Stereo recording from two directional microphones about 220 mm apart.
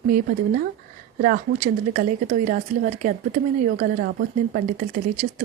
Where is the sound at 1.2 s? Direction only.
35° right (ahead or behind).